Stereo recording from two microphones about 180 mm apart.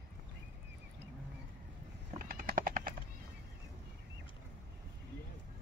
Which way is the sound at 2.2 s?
50° right (ahead or behind).